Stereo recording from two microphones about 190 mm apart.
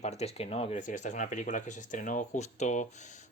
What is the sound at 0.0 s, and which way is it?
Speech, 35° left (ahead or behind).